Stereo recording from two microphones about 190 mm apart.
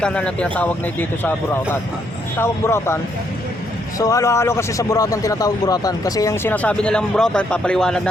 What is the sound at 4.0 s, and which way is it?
A man's voice, 15° left (ahead or behind).